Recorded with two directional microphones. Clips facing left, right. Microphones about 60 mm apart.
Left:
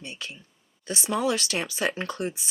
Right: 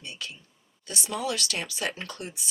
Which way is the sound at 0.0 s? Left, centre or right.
Left.